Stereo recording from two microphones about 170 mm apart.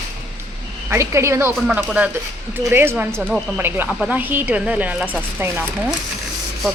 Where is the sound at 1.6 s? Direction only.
5° right (ahead or behind).